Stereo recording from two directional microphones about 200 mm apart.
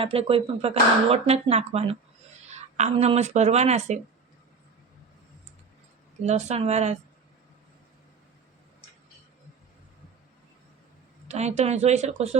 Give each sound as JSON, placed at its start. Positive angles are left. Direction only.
{"t": 0.0, "sound": "speech", "side_deg": -30}
{"t": 6.2, "sound": "speech", "side_deg": -35}
{"t": 11.3, "sound": "speech", "side_deg": -35}